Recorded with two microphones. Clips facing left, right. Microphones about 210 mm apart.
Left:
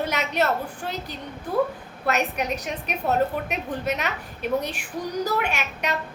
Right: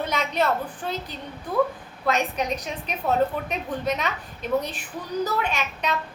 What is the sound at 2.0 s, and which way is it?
A woman's voice, 10° left (ahead or behind).